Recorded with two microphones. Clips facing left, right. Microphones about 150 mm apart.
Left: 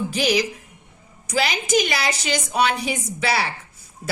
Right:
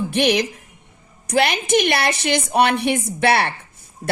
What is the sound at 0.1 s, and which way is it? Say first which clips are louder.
A woman's voice: right 4 dB; 60° right (ahead or behind).